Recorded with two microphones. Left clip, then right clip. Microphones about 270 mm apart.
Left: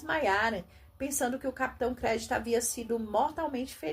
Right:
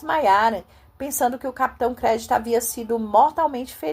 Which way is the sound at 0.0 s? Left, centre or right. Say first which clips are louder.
Right 10 dB; right.